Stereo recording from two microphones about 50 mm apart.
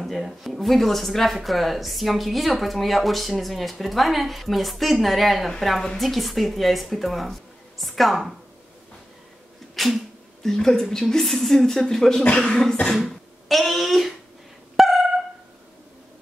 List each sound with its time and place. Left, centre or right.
0.0 s speech: centre
9.8 s sneeze: centre
10.5 s a woman's voice: centre
12.2 s speech: left
13.5 s speech: centre
14.8 s a sound: centre